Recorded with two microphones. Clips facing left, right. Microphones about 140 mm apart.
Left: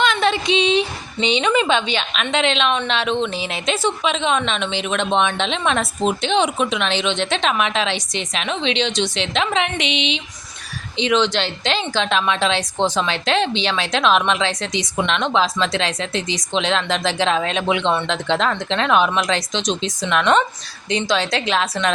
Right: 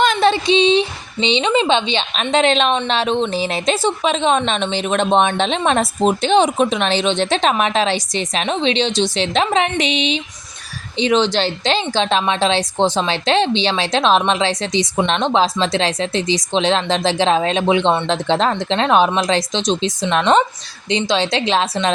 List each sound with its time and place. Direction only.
0.0 s a woman's voice: 35° right (ahead or behind)